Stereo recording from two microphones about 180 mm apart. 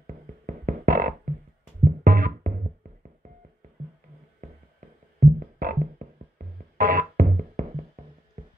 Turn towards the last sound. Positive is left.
turn(degrees=-45)  # may be behind; listen again after turning